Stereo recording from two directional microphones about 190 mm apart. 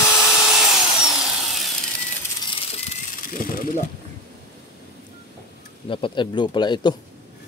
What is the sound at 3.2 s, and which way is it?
Mechanisms, 45° left (ahead or behind).